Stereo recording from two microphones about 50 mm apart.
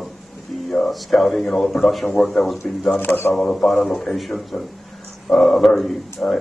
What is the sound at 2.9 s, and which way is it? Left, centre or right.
Speech, left.